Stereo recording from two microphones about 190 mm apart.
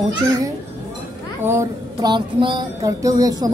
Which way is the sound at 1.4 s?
15° right (ahead or behind).